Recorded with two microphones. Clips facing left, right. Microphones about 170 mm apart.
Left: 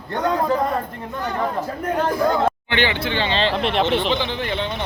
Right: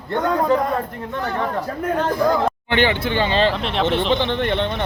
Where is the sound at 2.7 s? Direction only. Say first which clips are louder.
Right 3 dB; 45° right (ahead or behind).